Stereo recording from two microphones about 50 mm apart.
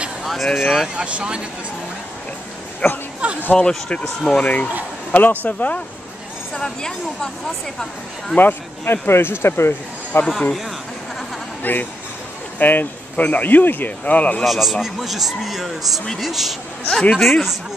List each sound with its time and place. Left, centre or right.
0.2 s a sound: centre
0.6 s a man's voice: centre
0.9 s speech: right
2.8 s speech: left
3.2 s a sound: right
3.5 s speech: centre
4.4 s speech: left
6.5 s speech: centre
8.4 s speech: left
11.6 s speech: left
14.4 s a man's voice: centre